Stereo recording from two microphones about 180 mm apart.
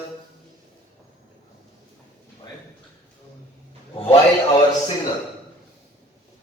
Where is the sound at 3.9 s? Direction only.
30° left (ahead or behind).